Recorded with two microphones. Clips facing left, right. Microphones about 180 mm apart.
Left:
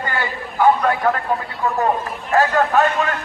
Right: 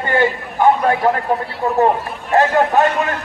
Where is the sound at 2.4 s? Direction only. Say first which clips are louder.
Right 2 dB; 20° right (ahead or behind).